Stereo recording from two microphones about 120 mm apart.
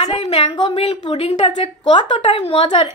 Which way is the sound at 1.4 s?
50° left (ahead or behind).